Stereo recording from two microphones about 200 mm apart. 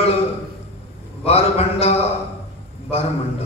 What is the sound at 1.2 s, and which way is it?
Mantra, 30° left (ahead or behind).